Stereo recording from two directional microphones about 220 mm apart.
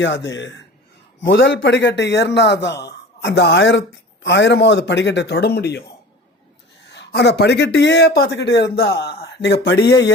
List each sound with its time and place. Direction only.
0.0 s a man's voice: 55° left (ahead or behind)
6.9 s a man's voice: 50° left (ahead or behind)